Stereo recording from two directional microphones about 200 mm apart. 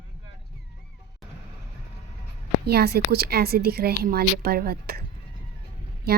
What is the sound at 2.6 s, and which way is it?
Speech, 55° right (ahead or behind).